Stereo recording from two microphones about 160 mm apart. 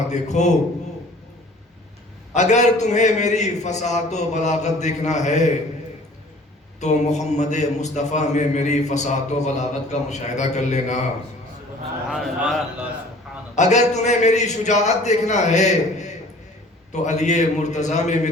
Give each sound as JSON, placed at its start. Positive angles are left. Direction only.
{"t": 0.1, "sound": "a man's voice", "side_deg": 45}
{"t": 2.3, "sound": "a man's voice", "side_deg": 45}
{"t": 6.7, "sound": "a man's voice", "side_deg": 45}
{"t": 12.1, "sound": "a man's voice", "side_deg": 0}
{"t": 13.6, "sound": "a man's voice", "side_deg": 45}